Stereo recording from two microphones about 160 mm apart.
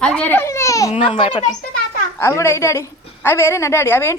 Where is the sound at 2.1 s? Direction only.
15° left (ahead or behind).